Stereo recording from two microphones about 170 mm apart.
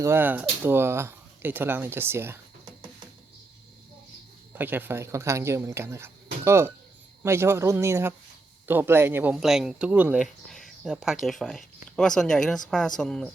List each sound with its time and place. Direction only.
0.0 s speech: 15° right (ahead or behind)
4.5 s speech: 10° right (ahead or behind)